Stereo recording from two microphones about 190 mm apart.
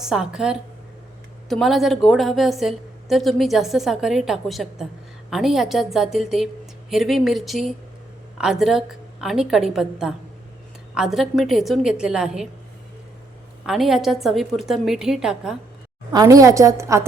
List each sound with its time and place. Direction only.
0.0 s a woman's voice: 5° right (ahead or behind)
13.7 s a woman's voice: centre (ahead or behind)
16.1 s a woman's voice: 20° right (ahead or behind)